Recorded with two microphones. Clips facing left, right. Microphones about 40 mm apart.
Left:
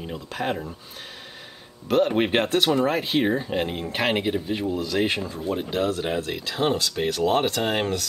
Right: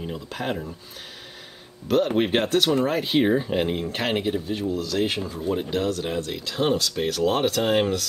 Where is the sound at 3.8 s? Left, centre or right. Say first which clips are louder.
Left 1 dB; centre.